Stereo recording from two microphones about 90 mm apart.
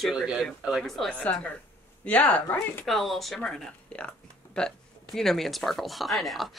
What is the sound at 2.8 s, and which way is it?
Speech, centre (ahead or behind).